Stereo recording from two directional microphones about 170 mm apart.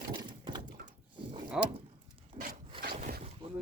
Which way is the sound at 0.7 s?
50° right (ahead or behind).